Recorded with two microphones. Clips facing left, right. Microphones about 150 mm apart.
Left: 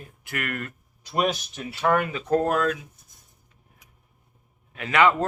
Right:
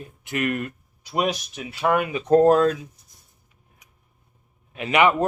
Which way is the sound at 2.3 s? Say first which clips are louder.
Right 7 dB; 30° right (ahead or behind).